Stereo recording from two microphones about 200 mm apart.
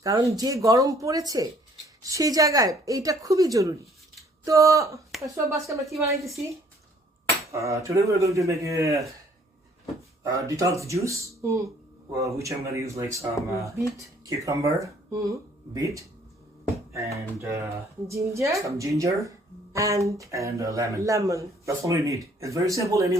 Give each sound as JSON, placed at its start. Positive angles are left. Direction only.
{"t": 0.0, "sound": "speech", "side_deg": -15}
{"t": 7.5, "sound": "speech", "side_deg": -15}
{"t": 10.2, "sound": "speech", "side_deg": -15}